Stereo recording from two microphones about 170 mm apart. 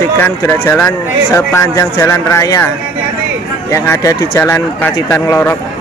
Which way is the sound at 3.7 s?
15° left (ahead or behind).